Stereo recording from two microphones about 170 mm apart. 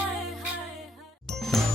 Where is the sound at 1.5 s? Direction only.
Centre (ahead or behind).